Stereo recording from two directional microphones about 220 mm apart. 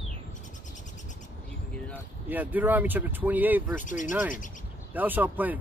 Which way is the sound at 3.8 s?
35° left (ahead or behind).